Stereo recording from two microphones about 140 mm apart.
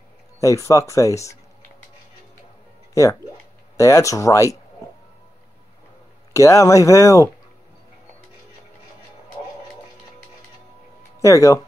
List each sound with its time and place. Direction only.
0.4 s speech: 20° left (ahead or behind)
2.9 s music: 25° left (ahead or behind)
3.7 s speech: 20° left (ahead or behind)
6.3 s speech: 25° left (ahead or behind)
11.1 s speech: 20° left (ahead or behind)